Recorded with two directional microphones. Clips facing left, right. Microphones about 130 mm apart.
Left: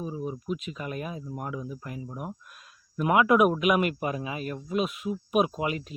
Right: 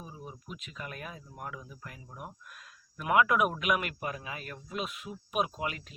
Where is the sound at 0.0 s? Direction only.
20° left (ahead or behind).